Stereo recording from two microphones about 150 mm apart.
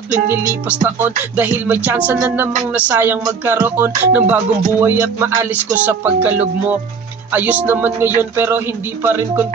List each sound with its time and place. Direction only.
0.3 s music: 15° right (ahead or behind)